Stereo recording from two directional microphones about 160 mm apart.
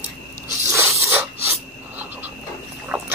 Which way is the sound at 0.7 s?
20° right (ahead or behind).